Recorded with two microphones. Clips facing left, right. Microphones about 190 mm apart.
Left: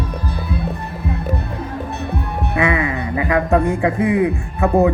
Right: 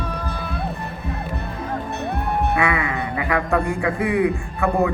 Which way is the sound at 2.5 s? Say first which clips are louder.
Left 3 dB; 20° left (ahead or behind).